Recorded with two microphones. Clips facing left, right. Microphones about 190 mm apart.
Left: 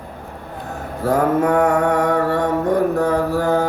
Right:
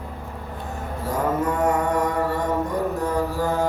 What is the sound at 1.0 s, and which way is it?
Mantra, 65° left (ahead or behind).